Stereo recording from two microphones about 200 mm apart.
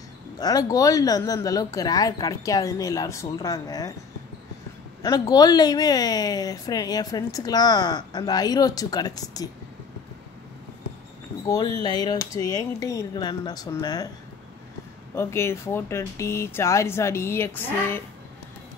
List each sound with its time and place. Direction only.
0.4 s speech: 20° left (ahead or behind)
5.0 s a woman's voice: 20° left (ahead or behind)
11.4 s a woman's voice: 20° left (ahead or behind)
15.1 s speech: 15° left (ahead or behind)